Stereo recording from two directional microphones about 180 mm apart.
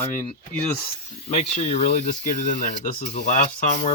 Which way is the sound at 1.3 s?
35° left (ahead or behind).